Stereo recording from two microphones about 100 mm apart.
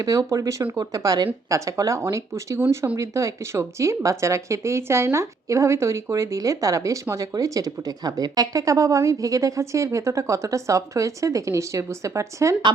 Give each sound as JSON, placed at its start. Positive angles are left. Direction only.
{"t": 0.0, "sound": "speech", "side_deg": -35}